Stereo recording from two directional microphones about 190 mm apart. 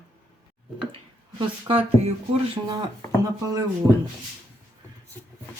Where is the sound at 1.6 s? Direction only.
30° right (ahead or behind).